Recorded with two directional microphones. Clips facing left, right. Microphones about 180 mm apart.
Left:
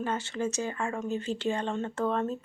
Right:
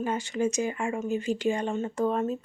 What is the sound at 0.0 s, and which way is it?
Speech, 15° right (ahead or behind).